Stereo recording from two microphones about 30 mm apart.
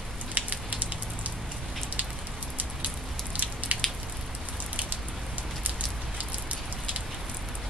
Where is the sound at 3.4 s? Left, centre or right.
Right.